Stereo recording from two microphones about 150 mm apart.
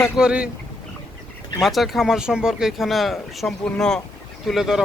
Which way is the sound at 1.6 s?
Centre (ahead or behind).